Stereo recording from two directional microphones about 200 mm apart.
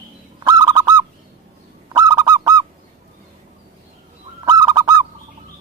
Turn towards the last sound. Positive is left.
turn(degrees=-20)  # may be behind; listen again after turning